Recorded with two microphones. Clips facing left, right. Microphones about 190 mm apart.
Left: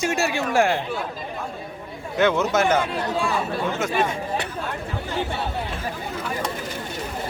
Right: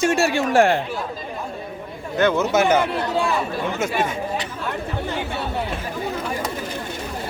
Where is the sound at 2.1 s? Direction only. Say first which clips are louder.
Right 2 dB; centre (ahead or behind).